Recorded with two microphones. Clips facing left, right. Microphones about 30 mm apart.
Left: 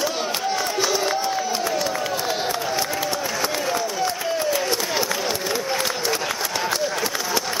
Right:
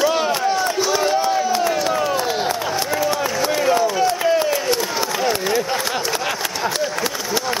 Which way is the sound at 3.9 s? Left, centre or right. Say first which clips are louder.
Right 7 dB; centre.